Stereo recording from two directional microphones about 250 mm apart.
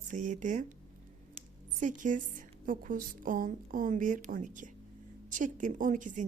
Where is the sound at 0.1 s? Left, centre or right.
Right.